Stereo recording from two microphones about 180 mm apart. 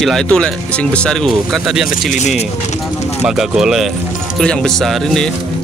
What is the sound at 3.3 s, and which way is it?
Speech, 5° right (ahead or behind).